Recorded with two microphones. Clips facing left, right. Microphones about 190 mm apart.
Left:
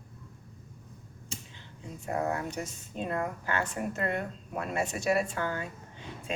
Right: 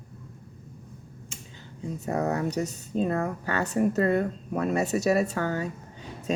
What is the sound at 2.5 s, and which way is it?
A woman's voice, 40° right (ahead or behind).